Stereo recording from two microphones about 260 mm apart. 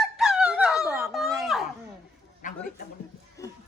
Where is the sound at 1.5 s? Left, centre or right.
Centre.